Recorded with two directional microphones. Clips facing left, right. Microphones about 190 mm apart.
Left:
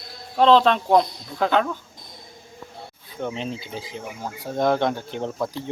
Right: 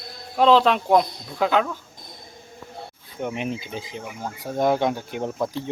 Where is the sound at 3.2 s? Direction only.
15° right (ahead or behind).